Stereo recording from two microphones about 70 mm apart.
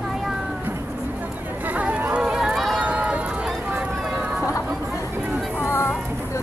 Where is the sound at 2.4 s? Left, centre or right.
Centre.